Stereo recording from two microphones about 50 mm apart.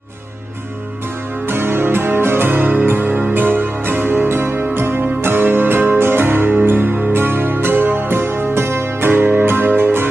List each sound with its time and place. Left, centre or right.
1.5 s music: right